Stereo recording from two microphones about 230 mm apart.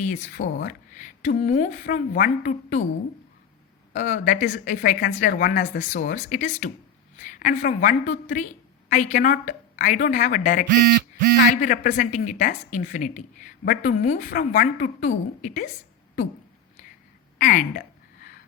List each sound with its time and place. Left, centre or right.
0.0 s speech: left
3.9 s speech: left
17.3 s a sound: left